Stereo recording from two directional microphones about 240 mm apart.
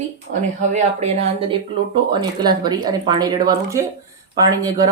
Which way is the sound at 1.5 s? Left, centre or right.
Centre.